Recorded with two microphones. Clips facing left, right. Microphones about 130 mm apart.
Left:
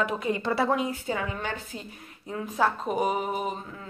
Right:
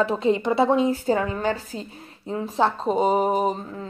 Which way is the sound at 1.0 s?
40° right (ahead or behind).